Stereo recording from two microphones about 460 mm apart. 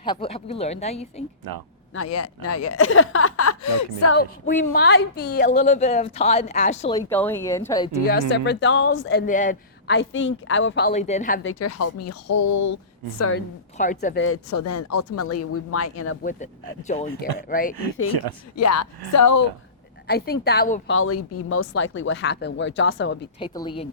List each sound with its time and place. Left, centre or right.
0.0 s a woman's voice: centre
2.0 s a woman's voice: left; by 7.9 s centre
8.4 s a woman's voice: left
11.6 s speech: left
13.7 s a woman's voice: centre
16.8 s a woman's voice: centre
18.1 s speech: right
18.5 s speech: left
20.1 s a woman's voice: centre
23.4 s a woman's voice: centre